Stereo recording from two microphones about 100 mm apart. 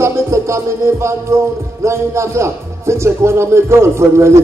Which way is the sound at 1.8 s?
30° right (ahead or behind).